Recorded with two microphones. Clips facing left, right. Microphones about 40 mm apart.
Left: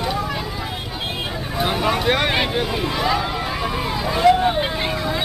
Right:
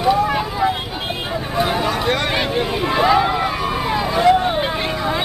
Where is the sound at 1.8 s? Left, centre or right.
Centre.